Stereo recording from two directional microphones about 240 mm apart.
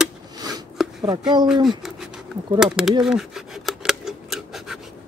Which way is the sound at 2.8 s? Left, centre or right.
Centre.